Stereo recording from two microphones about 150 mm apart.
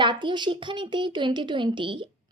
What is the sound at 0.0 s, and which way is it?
A woman's voice, 30° right (ahead or behind).